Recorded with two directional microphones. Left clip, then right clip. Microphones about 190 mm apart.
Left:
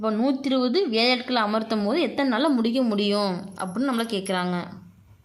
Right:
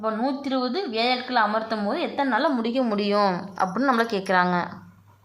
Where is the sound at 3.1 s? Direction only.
25° left (ahead or behind).